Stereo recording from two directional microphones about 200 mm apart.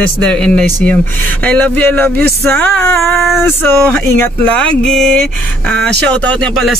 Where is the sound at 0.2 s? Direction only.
5° left (ahead or behind).